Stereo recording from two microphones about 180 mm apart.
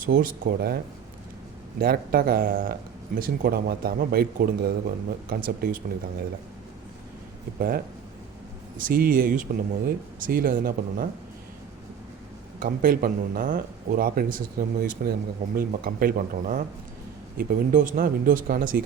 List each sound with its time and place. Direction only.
0.0 s speech: 50° right (ahead or behind)
1.8 s speech: 55° right (ahead or behind)
8.8 s speech: 55° right (ahead or behind)
12.5 s speech: 55° right (ahead or behind)